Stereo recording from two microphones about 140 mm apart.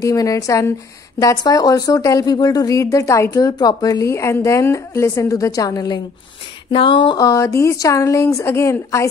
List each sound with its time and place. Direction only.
0.0 s speech: 25° left (ahead or behind)
6.7 s speech: 40° left (ahead or behind); by 9.0 s 20° left (ahead or behind)